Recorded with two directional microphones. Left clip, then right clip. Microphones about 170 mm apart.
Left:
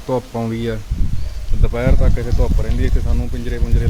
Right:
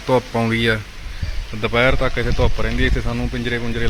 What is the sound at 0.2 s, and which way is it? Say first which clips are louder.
Speech: right 4 dB; 5° left (ahead or behind).